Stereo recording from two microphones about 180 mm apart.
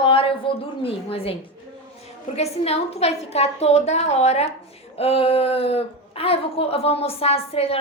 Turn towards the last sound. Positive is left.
turn(degrees=35)  # may be behind; listen again after turning